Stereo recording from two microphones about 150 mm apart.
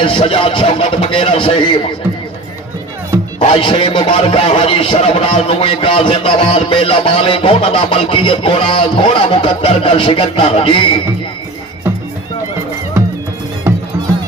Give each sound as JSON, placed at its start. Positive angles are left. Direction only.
{"t": 0.0, "sound": "a man's voice", "side_deg": 35}
{"t": 3.4, "sound": "a man's voice", "side_deg": 35}
{"t": 13.7, "sound": "music", "side_deg": -15}